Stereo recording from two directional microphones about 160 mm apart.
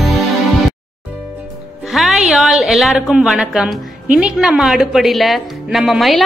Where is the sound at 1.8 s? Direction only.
Centre (ahead or behind).